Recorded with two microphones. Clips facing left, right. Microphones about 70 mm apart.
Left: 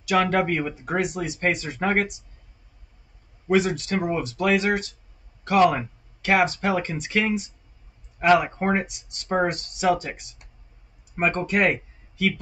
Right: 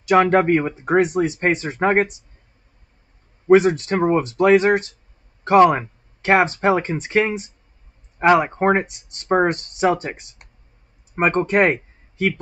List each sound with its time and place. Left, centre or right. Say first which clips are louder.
0.0 s speech: right 6 dB; right
3.4 s speech: right 8 dB; right